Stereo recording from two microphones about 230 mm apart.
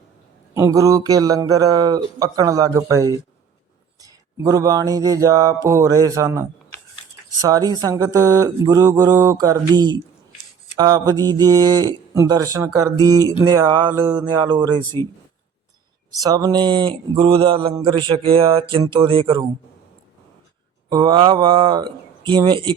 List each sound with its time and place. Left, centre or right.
0.5 s speech: centre
16.1 s speech: centre
20.9 s speech: centre